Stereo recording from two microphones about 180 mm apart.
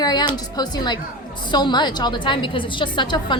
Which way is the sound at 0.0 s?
25° left (ahead or behind).